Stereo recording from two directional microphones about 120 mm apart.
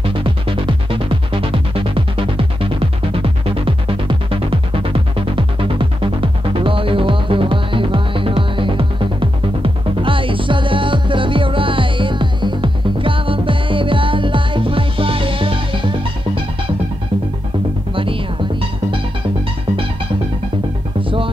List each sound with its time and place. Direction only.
0.2 s music: 45° right (ahead or behind)
17.9 s music: 45° right (ahead or behind)